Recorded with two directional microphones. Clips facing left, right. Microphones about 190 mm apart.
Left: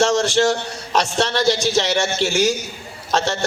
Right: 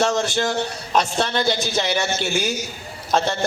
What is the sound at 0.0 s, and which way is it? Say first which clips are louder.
A man's voice: left 4 dB; 85° left.